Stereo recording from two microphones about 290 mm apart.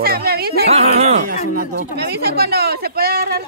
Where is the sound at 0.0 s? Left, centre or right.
Right.